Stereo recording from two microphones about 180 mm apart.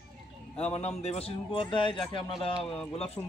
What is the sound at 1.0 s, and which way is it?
Speech, 35° left (ahead or behind).